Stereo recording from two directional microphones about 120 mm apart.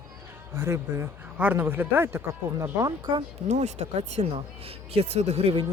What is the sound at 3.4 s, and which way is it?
Speech, 70° right (ahead or behind).